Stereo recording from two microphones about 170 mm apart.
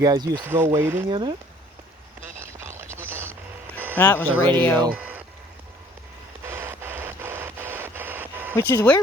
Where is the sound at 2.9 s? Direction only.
15° right (ahead or behind).